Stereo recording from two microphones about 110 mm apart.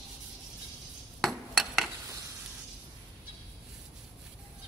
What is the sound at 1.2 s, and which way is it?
Cutlery, centre (ahead or behind).